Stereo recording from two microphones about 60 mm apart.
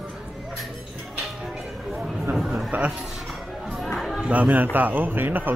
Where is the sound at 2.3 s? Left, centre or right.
Centre.